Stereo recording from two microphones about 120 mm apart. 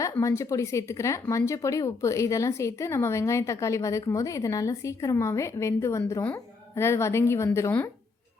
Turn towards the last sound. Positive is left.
turn(degrees=20)  # may be behind; listen again after turning